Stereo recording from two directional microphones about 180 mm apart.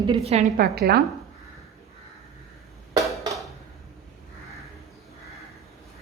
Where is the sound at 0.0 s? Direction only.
30° right (ahead or behind).